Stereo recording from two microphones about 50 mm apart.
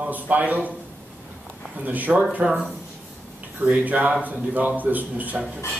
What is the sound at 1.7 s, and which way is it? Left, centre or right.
Speech, right.